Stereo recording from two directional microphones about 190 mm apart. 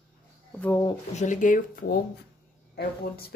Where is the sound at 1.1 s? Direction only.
40° left (ahead or behind).